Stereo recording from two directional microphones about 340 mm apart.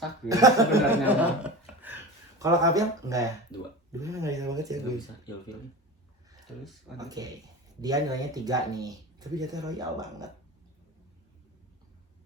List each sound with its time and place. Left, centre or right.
0.3 s speech: centre
6.9 s speech: centre